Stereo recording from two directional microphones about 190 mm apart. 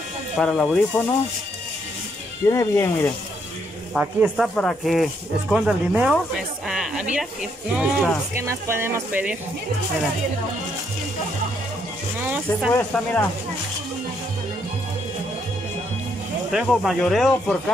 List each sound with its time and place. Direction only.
0.4 s speech: centre (ahead or behind)
2.4 s speech: 15° left (ahead or behind)
3.9 s speech: 5° right (ahead or behind)
12.2 s music: 10° right (ahead or behind)
12.9 s speech: 10° left (ahead or behind)
16.5 s speech: centre (ahead or behind)